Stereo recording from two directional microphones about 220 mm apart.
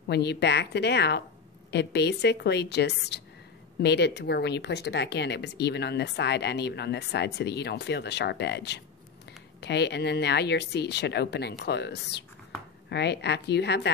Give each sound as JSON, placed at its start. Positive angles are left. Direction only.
{"t": 0.1, "sound": "speech", "side_deg": 50}